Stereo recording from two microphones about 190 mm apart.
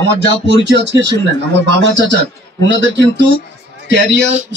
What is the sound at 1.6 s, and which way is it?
A man's voice, 65° right (ahead or behind).